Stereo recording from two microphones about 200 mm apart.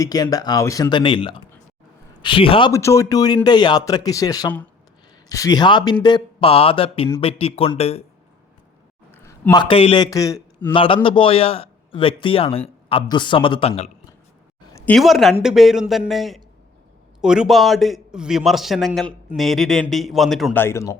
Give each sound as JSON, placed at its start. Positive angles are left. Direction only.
{"t": 0.0, "sound": "a man's voice", "side_deg": 20}
{"t": 9.1, "sound": "a man's voice", "side_deg": 10}
{"t": 14.7, "sound": "a sound", "side_deg": 15}
{"t": 14.9, "sound": "a man's voice", "side_deg": 0}